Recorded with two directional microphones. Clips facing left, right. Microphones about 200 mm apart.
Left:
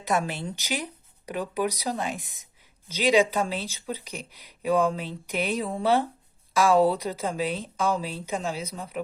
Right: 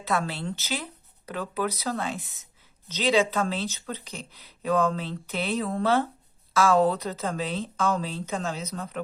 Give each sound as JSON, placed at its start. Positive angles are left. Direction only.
{"t": 0.0, "sound": "speech", "side_deg": 15}